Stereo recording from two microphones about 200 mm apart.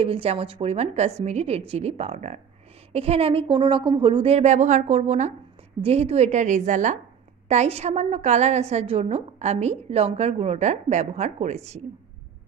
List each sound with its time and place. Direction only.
0.0 s a woman's voice: 30° right (ahead or behind)